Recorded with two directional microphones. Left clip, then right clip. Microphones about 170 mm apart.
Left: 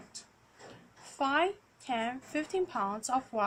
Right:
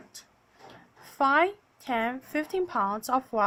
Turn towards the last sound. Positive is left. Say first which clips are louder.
# right 5 dB
turn(degrees=-40)  # may be behind; listen again after turning